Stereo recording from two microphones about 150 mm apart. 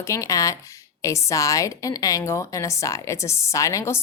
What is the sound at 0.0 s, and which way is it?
Speech, 20° left (ahead or behind).